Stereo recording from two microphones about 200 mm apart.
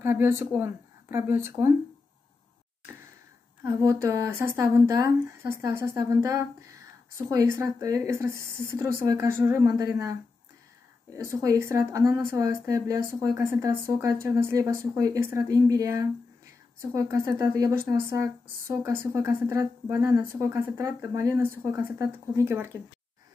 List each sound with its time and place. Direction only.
0.0 s speech: 10° right (ahead or behind)
3.6 s speech: 15° right (ahead or behind)
11.2 s speech: 15° right (ahead or behind)